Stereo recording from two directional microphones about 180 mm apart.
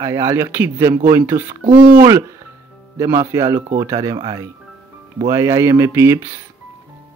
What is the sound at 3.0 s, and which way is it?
Speech, 15° right (ahead or behind).